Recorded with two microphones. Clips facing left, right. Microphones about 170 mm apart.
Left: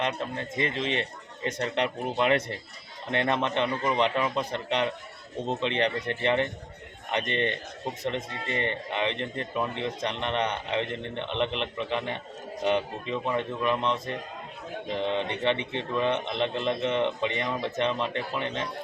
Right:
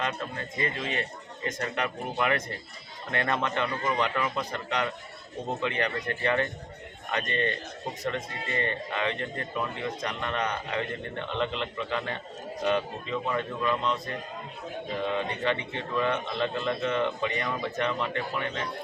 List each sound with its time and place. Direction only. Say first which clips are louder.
0.0 s a man's voice: left 2 dB; 20° left (ahead or behind)